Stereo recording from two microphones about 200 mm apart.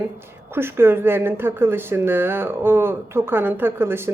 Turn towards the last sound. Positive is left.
turn(degrees=-10)  # may be behind; listen again after turning